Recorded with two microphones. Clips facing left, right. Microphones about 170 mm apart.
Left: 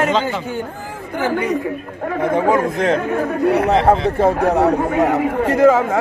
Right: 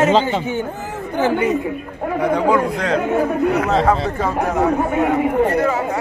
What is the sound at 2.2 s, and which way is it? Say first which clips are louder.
A man's voice: left 1 dB; 20° left (ahead or behind).